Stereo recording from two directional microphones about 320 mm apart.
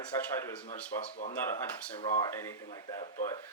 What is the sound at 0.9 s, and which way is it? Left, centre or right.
A man's voice, centre.